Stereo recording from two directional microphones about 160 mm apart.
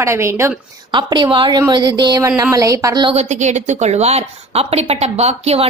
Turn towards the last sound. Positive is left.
turn(degrees=-40)  # may be behind; listen again after turning